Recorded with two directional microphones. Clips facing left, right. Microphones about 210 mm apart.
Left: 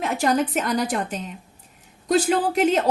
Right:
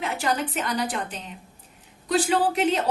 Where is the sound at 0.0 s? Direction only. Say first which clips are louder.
Left 5 dB; 45° left (ahead or behind).